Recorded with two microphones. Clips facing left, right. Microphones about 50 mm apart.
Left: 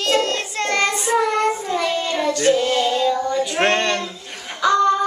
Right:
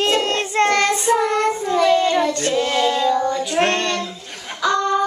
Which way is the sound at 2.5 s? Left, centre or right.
Centre.